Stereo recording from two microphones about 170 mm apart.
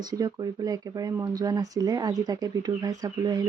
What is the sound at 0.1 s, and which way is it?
Speech, 20° right (ahead or behind).